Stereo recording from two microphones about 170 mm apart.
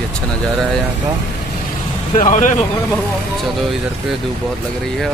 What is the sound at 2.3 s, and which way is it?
Speech, 50° left (ahead or behind).